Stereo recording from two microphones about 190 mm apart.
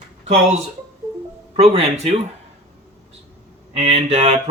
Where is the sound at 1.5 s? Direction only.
35° right (ahead or behind).